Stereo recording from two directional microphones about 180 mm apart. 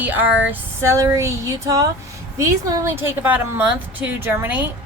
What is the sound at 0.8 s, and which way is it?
A woman's voice, 15° right (ahead or behind).